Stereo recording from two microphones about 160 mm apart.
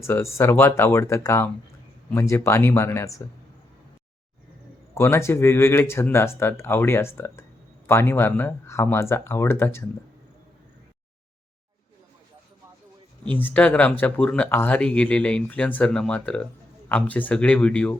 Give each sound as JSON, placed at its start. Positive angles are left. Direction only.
{"t": 0.0, "sound": "speech", "side_deg": 15}
{"t": 4.9, "sound": "speech", "side_deg": 15}
{"t": 13.2, "sound": "speech", "side_deg": 10}